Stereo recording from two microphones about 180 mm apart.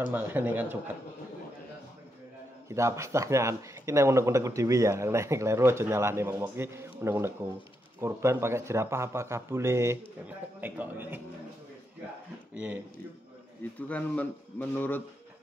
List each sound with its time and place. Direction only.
0.0 s speech: 10° right (ahead or behind)
2.7 s speech: 15° right (ahead or behind)
13.7 s speech: 10° left (ahead or behind)